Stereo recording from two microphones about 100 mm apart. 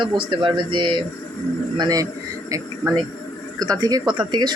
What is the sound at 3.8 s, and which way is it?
Speech, 45° right (ahead or behind).